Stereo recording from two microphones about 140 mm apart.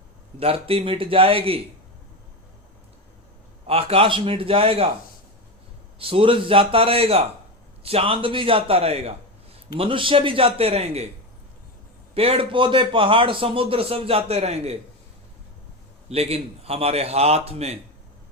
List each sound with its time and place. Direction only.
0.3 s a man's voice: 40° right (ahead or behind)
3.7 s a man's voice: 45° right (ahead or behind)
6.0 s a man's voice: 40° right (ahead or behind)
12.1 s a man's voice: 45° right (ahead or behind)
16.0 s a man's voice: 45° right (ahead or behind)